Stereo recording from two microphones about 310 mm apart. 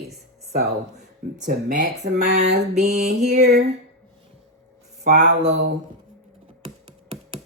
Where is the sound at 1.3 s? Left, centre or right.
Right.